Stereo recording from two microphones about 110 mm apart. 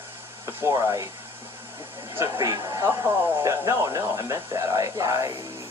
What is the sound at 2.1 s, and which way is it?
Speech, 25° right (ahead or behind).